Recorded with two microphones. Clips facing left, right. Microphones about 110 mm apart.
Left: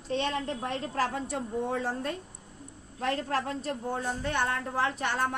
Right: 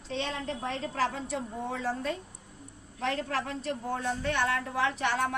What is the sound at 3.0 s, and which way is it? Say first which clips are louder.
Speech: left 1 dB; 40° left (ahead or behind).